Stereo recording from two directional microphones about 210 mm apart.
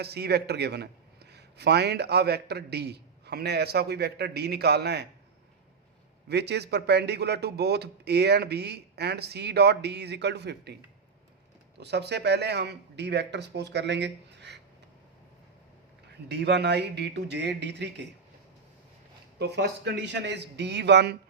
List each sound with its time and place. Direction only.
0.0 s a man's voice: 50° right (ahead or behind)
6.2 s a man's voice: 50° right (ahead or behind)
11.8 s a man's voice: 55° right (ahead or behind)
16.0 s a man's voice: 55° right (ahead or behind)
19.4 s speech: 50° right (ahead or behind)